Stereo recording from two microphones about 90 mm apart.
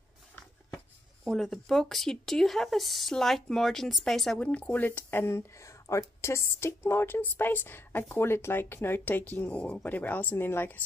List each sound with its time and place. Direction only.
1.2 s speech: 5° left (ahead or behind)
4.4 s speech: 15° left (ahead or behind)